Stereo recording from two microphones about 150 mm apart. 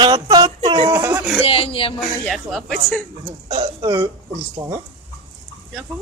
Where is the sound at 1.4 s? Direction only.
40° left (ahead or behind).